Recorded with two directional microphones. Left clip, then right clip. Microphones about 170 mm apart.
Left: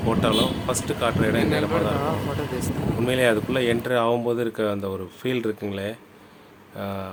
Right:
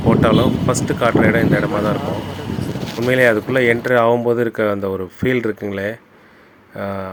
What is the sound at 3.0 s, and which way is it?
Speech, 25° right (ahead or behind).